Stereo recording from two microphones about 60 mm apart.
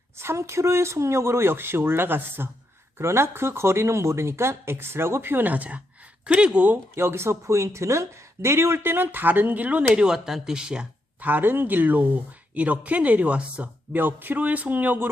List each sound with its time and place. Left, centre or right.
0.2 s speech: right
3.0 s speech: right; by 6.7 s centre
6.9 s speech: right
9.9 s speech: centre
11.2 s speech: right